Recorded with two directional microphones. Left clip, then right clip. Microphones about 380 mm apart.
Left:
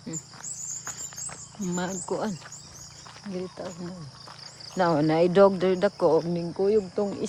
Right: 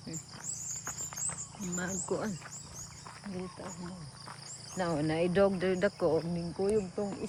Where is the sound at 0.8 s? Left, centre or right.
Centre.